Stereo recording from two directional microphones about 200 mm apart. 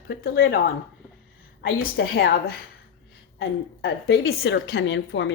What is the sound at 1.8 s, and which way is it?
Speech, 45° left (ahead or behind).